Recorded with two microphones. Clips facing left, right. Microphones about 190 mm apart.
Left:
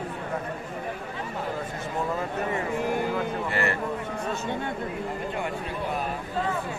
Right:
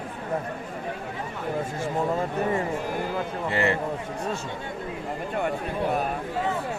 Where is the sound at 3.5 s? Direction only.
20° right (ahead or behind).